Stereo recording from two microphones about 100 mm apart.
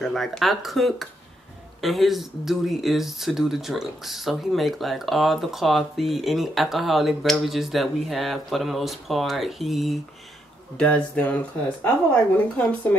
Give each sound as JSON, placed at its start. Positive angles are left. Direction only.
{"t": 0.0, "sound": "speech", "side_deg": 5}
{"t": 10.8, "sound": "speech", "side_deg": 15}